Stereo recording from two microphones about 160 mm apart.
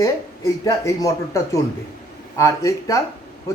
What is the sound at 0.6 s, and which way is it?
Speech, 20° left (ahead or behind).